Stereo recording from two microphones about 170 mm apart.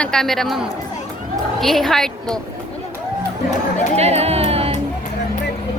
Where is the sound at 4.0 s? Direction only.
40° right (ahead or behind).